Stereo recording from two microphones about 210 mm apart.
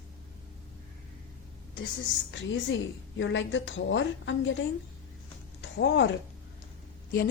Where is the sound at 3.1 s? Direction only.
60° left (ahead or behind).